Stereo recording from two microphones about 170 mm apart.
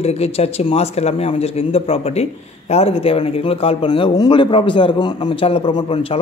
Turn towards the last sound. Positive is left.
turn(degrees=35)  # may be behind; listen again after turning